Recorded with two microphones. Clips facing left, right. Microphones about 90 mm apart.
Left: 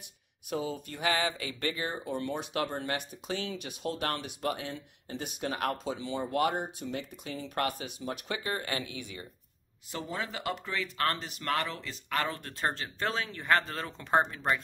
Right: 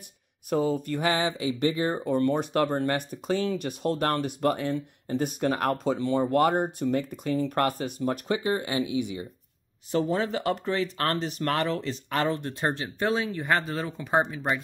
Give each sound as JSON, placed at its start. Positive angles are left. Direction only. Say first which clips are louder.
{"t": 0.5, "sound": "speech", "louder": "right 9 dB", "side_deg": -45}
{"t": 1.0, "sound": "speech", "louder": "right 3 dB", "side_deg": -25}
{"t": 1.8, "sound": "speech", "louder": "right 9 dB", "side_deg": -45}
{"t": 8.3, "sound": "speech", "louder": "right 5 dB", "side_deg": -20}
{"t": 9.8, "sound": "speech", "louder": "right 11 dB", "side_deg": -40}